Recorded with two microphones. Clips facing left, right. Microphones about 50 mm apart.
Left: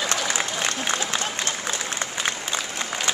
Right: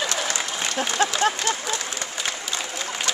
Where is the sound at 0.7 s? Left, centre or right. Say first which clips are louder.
Right 4 dB; right.